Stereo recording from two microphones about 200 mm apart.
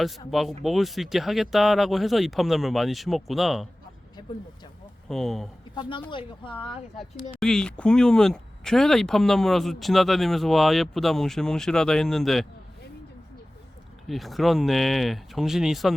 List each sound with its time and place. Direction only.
0.3 s speech: centre (ahead or behind)
5.0 s speech: centre (ahead or behind)
6.1 s speech: 25° left (ahead or behind)
6.9 s speech: centre (ahead or behind)
14.1 s speech: centre (ahead or behind)